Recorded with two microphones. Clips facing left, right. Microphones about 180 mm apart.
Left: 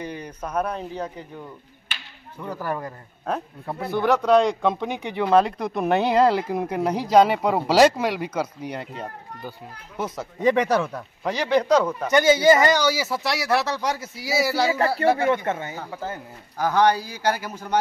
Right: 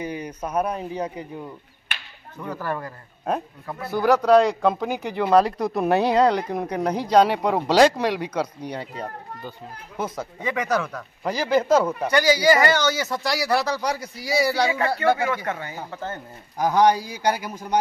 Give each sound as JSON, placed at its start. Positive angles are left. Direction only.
{"t": 0.0, "sound": "speech", "side_deg": -10}
{"t": 2.4, "sound": "speech", "side_deg": 10}
{"t": 3.9, "sound": "speech", "side_deg": -5}
{"t": 10.4, "sound": "speech", "side_deg": 30}
{"t": 11.2, "sound": "speech", "side_deg": 0}
{"t": 12.1, "sound": "speech", "side_deg": 25}
{"t": 15.1, "sound": "speech", "side_deg": 25}
{"t": 15.9, "sound": "speech", "side_deg": 10}
{"t": 16.5, "sound": "speech", "side_deg": -15}